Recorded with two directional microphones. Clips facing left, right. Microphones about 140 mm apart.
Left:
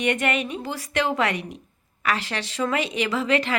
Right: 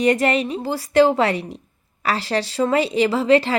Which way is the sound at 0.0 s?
35° right (ahead or behind).